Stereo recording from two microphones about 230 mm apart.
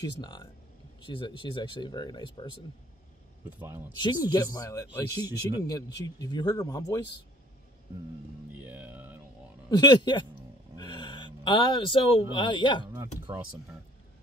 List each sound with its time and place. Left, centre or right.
0.0 s speech: centre
3.6 s speech: centre
3.9 s speech: centre
8.5 s speech: centre
9.7 s speech: centre
12.9 s speech: centre